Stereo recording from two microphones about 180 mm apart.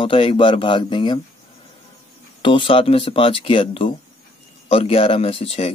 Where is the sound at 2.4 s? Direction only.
30° left (ahead or behind).